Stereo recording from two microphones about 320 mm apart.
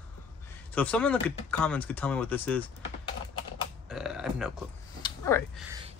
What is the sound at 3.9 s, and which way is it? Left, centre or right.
Speech, centre.